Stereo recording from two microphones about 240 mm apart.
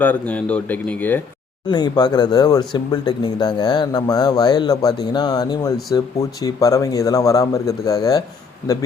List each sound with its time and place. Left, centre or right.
0.0 s speech: centre